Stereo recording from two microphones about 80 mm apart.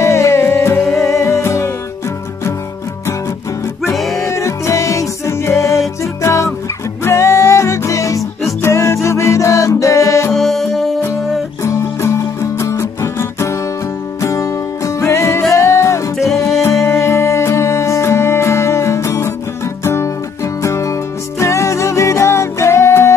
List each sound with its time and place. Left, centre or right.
0.0 s music: left
3.9 s music: centre
4.3 s music: left
10.3 s music: centre
11.6 s music: left
16.3 s music: centre
17.0 s music: left